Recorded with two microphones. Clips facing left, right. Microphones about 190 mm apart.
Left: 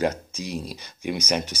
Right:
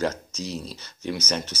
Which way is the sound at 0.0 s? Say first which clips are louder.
Left 2 dB; 15° left (ahead or behind).